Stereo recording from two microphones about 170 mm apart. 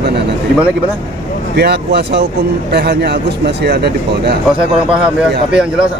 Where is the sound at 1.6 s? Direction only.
75° right (ahead or behind).